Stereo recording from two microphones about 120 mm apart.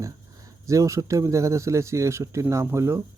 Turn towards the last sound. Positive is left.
turn(degrees=-20)  # may be behind; listen again after turning